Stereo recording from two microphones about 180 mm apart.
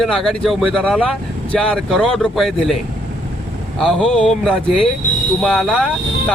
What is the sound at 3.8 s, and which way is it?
Speech, 5° left (ahead or behind).